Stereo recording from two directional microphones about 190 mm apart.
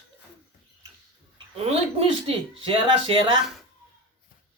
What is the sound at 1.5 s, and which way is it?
Speech, 30° right (ahead or behind).